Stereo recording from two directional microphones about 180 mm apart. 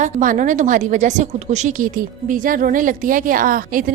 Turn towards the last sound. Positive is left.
turn(degrees=-50)  # may be behind; listen again after turning